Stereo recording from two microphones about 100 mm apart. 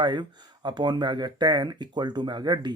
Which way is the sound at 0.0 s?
45° right (ahead or behind).